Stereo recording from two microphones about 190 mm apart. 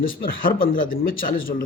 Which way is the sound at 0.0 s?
50° left (ahead or behind).